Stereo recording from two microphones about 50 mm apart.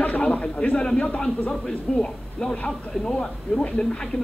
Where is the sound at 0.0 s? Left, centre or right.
Left.